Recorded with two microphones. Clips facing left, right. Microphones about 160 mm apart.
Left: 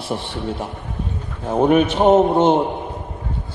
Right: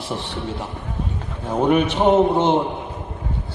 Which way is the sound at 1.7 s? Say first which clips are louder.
Left 2 dB; 45° left (ahead or behind).